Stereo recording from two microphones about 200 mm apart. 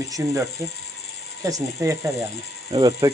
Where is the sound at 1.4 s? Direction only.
15° right (ahead or behind).